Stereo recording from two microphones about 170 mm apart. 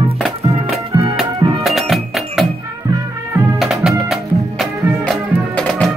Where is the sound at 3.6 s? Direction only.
Centre (ahead or behind).